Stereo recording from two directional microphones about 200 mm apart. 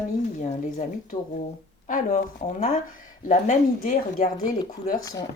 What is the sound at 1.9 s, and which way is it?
Speech, 40° left (ahead or behind).